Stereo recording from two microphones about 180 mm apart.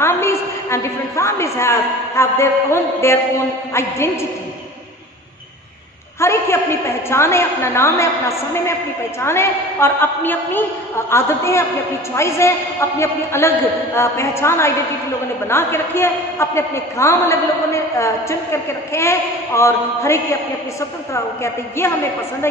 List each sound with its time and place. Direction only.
0.0 s a woman's voice: 15° left (ahead or behind)
6.1 s a woman's voice: 15° left (ahead or behind)